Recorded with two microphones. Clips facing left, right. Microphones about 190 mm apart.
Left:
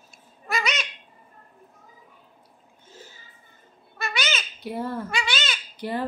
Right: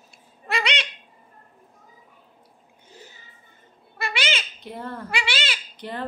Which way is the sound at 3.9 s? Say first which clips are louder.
Right 1 dB; 30° right (ahead or behind).